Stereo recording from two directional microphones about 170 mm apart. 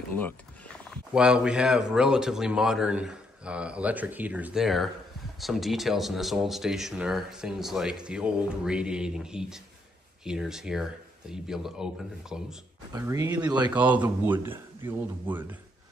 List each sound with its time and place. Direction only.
1.1 s speech: 5° right (ahead or behind)
12.9 s a man's voice: 20° right (ahead or behind)